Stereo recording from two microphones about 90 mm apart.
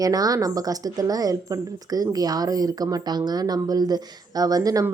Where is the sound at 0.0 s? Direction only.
40° right (ahead or behind).